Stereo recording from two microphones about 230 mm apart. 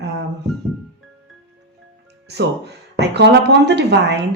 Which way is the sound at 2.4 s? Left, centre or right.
Right.